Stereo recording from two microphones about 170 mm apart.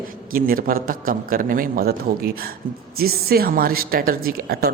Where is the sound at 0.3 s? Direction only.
60° right (ahead or behind).